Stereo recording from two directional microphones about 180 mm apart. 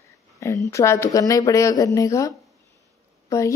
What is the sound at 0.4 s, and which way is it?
A woman's voice, 15° left (ahead or behind).